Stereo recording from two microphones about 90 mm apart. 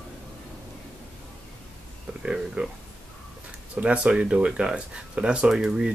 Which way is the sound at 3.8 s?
10° right (ahead or behind).